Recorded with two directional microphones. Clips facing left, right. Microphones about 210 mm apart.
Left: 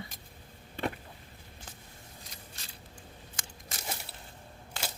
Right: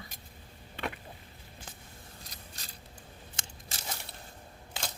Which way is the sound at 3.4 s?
25° right (ahead or behind).